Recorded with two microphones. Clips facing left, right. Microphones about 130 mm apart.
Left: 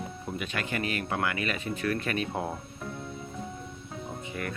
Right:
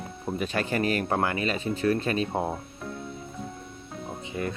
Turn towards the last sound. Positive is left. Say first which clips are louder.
# right 5 dB
turn(degrees=-25)  # may be behind; listen again after turning